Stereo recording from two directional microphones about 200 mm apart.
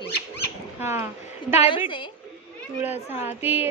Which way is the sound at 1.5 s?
30° left (ahead or behind).